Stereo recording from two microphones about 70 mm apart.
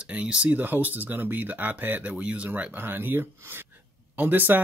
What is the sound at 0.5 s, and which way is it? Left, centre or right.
Speech, right.